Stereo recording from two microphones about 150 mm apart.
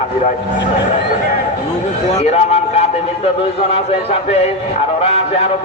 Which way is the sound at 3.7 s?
40° left (ahead or behind).